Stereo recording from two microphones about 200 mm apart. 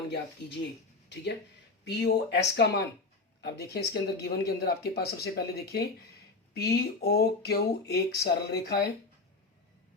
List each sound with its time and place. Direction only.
1.1 s speech: 55° left (ahead or behind)